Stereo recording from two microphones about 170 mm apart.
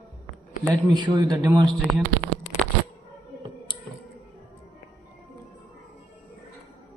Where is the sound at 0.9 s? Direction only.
25° right (ahead or behind).